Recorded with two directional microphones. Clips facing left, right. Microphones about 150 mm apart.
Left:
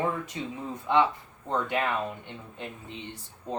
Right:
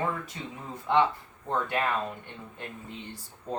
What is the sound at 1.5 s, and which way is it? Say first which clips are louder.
Speech: even; 20° left (ahead or behind).